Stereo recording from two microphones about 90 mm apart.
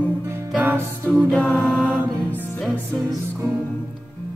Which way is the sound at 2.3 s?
20° left (ahead or behind).